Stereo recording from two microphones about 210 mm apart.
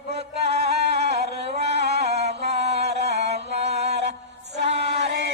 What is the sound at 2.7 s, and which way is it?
Music, 50° right (ahead or behind).